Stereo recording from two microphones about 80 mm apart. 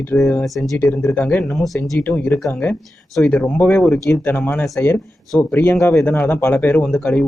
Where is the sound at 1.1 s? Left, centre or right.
Left.